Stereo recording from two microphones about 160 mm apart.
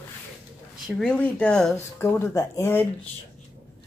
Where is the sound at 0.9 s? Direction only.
5° left (ahead or behind).